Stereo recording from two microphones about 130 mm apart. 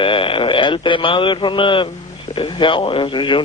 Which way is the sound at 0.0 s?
40° left (ahead or behind).